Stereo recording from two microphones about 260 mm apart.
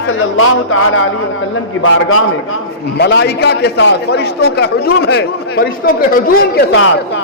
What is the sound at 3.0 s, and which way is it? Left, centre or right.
A man's voice, left.